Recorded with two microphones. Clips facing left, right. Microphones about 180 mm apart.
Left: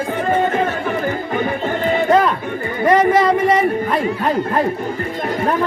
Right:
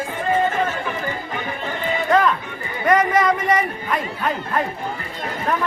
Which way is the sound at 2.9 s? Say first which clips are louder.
Left 4 dB; 30° left (ahead or behind).